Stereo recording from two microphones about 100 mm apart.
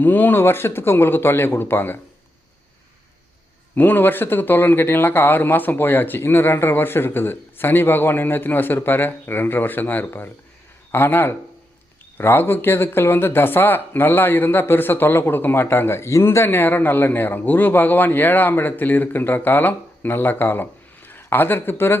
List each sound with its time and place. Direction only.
0.0 s speech: 20° left (ahead or behind)
3.8 s speech: 20° left (ahead or behind)